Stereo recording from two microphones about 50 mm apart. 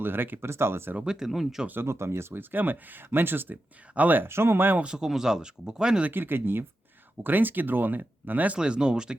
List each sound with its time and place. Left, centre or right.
0.0 s speech: right
0.5 s speech: right
1.0 s speech: centre
1.8 s speech: right
3.9 s speech: right
4.2 s speech: right
4.8 s speech: centre
6.1 s speech: right
8.5 s speech: centre